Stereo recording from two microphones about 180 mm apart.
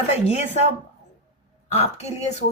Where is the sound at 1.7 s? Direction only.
35° left (ahead or behind).